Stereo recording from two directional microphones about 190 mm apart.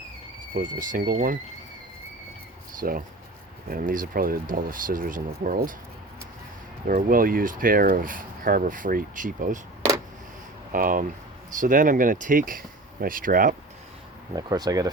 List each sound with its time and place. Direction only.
0.5 s speech: 45° right (ahead or behind)
2.8 s speech: 50° right (ahead or behind)
6.8 s speech: 45° right (ahead or behind)
10.7 s speech: 45° right (ahead or behind)
14.3 s speech: 20° right (ahead or behind)